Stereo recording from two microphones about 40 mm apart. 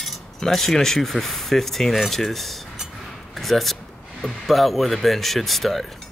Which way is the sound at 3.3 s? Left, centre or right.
Centre.